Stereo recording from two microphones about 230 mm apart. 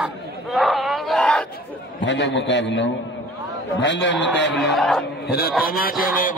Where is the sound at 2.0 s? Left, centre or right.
Left.